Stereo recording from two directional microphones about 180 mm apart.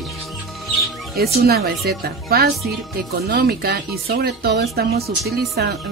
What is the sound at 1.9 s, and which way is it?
Speech, 55° right (ahead or behind).